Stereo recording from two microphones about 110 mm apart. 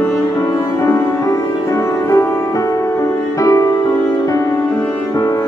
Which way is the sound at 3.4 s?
30° left (ahead or behind).